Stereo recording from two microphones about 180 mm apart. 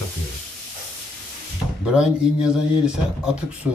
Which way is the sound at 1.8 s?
5° right (ahead or behind).